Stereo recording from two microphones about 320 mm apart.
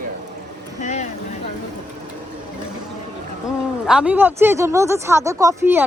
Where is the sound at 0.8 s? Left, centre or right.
Left.